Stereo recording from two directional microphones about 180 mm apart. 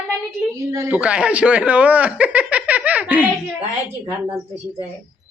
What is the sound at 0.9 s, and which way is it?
A man's voice, 5° right (ahead or behind).